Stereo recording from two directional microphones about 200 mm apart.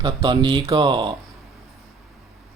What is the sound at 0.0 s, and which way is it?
Speech, 20° right (ahead or behind).